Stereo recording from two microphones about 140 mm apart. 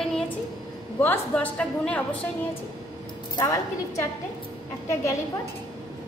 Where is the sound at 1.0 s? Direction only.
15° left (ahead or behind).